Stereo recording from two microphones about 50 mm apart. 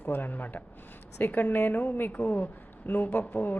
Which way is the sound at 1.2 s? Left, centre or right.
Left.